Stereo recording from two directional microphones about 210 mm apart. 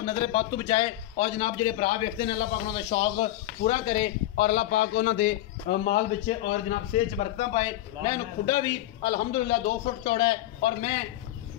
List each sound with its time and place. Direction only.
0.0 s a man's voice: 20° left (ahead or behind)